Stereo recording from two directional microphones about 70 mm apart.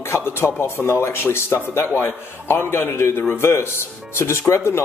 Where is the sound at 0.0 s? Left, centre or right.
Left.